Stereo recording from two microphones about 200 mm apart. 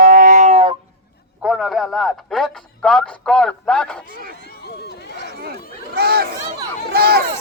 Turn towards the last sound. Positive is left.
turn(degrees=-50)  # may be behind; listen again after turning